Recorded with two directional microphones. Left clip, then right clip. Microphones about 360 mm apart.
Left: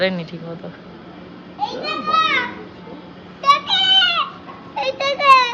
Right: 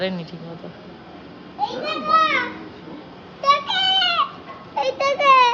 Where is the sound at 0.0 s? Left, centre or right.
Centre.